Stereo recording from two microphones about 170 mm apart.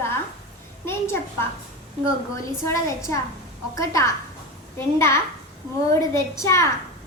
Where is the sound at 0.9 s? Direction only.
15° left (ahead or behind).